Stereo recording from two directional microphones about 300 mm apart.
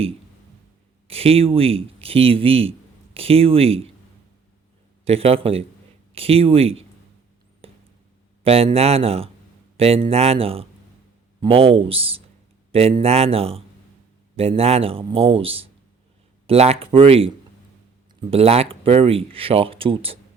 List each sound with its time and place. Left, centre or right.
1.0 s speech: centre
5.0 s speech: centre
8.4 s speech: centre